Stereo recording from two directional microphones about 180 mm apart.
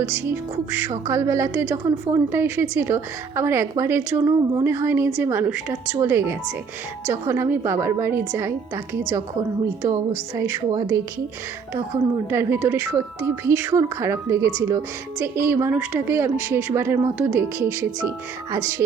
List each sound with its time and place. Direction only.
0.0 s a woman's voice: 10° right (ahead or behind)
12.3 s a woman's voice: 10° right (ahead or behind)